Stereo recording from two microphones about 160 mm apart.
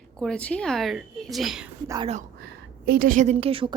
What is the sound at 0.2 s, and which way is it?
Speech, 5° left (ahead or behind).